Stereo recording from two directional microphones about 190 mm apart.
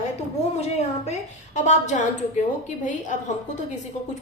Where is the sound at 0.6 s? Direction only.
35° left (ahead or behind).